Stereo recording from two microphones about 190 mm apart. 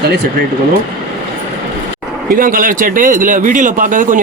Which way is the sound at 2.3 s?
45° right (ahead or behind).